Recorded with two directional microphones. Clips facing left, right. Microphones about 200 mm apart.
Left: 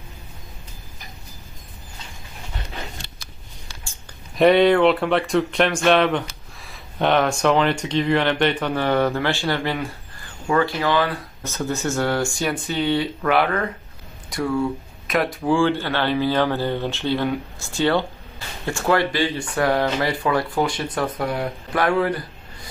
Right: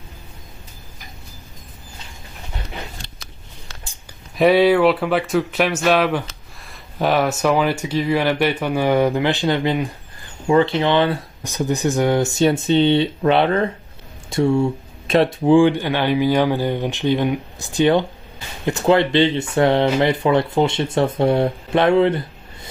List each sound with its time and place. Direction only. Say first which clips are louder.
4.4 s speech: right 1 dB; 5° right (ahead or behind); by 22.7 s 25° right (ahead or behind)